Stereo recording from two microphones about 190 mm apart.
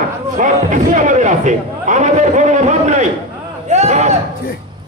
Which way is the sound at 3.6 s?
35° right (ahead or behind).